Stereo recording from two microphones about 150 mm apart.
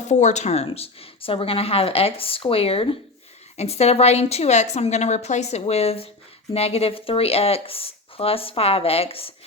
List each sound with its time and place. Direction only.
0.0 s a woman's voice: 50° left (ahead or behind)